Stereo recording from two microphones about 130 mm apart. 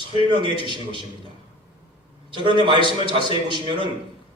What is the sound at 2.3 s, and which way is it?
A man's voice, 40° right (ahead or behind).